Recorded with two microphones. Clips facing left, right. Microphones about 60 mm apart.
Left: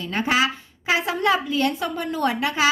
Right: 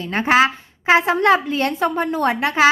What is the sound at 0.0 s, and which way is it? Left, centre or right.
A woman's voice, right.